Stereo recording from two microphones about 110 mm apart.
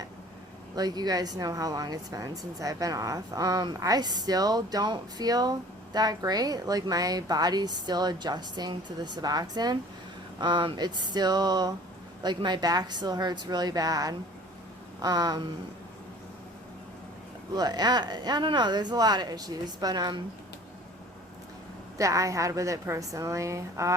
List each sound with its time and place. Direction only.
0.8 s speech: 35° right (ahead or behind)
17.5 s speech: 35° right (ahead or behind)
21.9 s a woman's voice: 30° right (ahead or behind)